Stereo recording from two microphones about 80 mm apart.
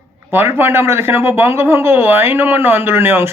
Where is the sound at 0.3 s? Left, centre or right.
Right.